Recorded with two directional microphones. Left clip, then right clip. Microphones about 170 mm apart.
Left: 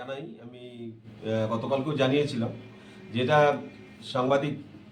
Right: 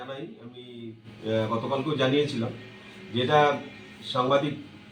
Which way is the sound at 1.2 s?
25° left (ahead or behind).